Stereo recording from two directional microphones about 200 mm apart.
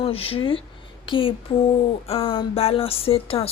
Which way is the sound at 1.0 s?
25° left (ahead or behind).